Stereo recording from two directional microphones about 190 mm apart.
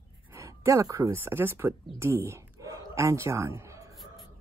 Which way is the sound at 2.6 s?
15° right (ahead or behind).